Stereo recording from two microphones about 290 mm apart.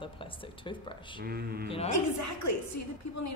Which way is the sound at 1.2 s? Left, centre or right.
Right.